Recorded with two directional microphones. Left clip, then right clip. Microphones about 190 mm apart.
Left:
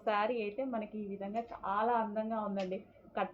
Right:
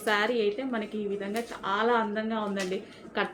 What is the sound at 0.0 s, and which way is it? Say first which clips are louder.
A woman's voice: right 7 dB; 25° right (ahead or behind).